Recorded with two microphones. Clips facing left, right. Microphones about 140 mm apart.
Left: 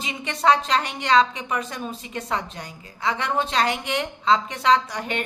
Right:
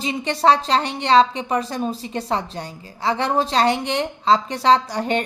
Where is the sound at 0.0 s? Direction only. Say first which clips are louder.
Right 4 dB; 35° right (ahead or behind).